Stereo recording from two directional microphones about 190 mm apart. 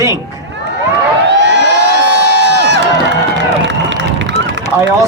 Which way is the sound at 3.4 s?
70° right (ahead or behind).